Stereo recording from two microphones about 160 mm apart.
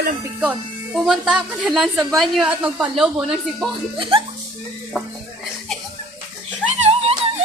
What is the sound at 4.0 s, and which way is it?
Speech, 35° right (ahead or behind).